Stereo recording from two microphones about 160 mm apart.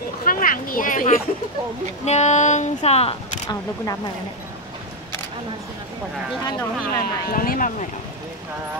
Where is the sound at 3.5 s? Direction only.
25° left (ahead or behind).